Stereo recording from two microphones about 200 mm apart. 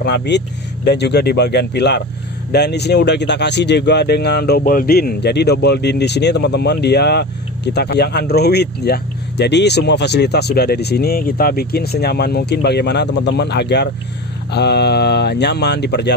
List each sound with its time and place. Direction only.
0.0 s speech: 60° left (ahead or behind)